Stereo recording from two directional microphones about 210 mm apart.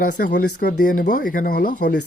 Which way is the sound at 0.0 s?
45° left (ahead or behind).